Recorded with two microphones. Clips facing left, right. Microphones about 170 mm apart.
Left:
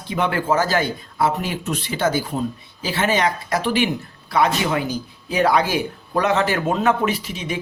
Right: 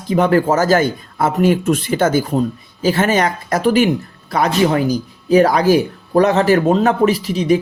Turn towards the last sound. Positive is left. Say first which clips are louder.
# right 10 dB
turn(degrees=-40)  # may be behind; listen again after turning